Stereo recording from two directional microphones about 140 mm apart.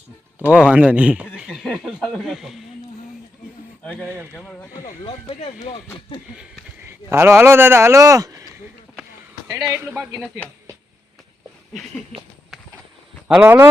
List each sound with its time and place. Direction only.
0.3 s speech: 10° right (ahead or behind)
1.5 s speech: 5° left (ahead or behind)
4.0 s speech: 15° right (ahead or behind)
4.4 s speech: 10° left (ahead or behind)
5.0 s speech: 40° left (ahead or behind)
6.8 s speech: 20° right (ahead or behind)
9.6 s speech: 15° right (ahead or behind)
13.2 s a man's voice: centre (ahead or behind)